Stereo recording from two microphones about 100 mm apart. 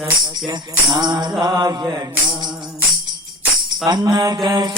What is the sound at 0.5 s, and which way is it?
Music, 45° right (ahead or behind).